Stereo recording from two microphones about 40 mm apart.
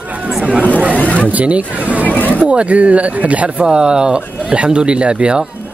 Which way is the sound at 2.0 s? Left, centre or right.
Left.